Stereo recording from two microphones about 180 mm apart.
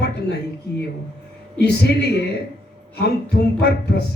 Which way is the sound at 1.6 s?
65° left (ahead or behind).